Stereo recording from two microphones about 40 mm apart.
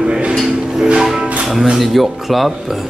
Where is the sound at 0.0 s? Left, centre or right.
Right.